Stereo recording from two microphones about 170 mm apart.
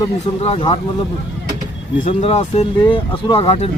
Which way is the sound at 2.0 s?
40° left (ahead or behind).